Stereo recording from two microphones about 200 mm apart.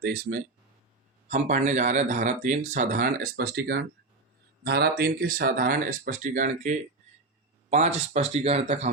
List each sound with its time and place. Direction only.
0.0 s speech: 50° right (ahead or behind)